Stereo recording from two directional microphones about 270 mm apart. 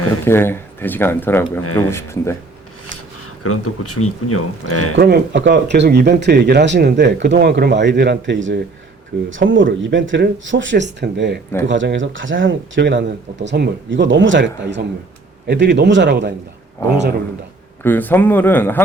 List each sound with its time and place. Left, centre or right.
0.3 s speech: centre
3.4 s speech: left
4.9 s speech: right
17.8 s speech: centre